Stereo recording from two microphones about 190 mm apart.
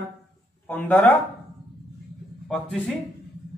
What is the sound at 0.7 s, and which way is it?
Speech, 10° left (ahead or behind).